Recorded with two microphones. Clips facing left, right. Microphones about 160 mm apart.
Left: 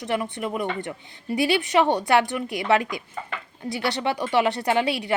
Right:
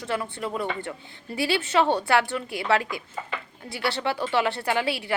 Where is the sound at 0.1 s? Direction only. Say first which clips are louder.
Left 3 dB; 20° left (ahead or behind).